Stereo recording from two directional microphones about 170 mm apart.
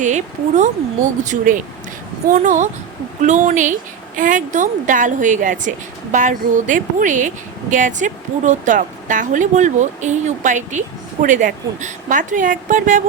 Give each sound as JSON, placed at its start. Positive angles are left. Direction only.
{"t": 0.0, "sound": "speech", "side_deg": -45}